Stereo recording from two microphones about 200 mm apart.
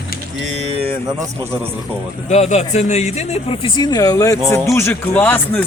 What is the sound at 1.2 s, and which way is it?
Speech, 10° right (ahead or behind).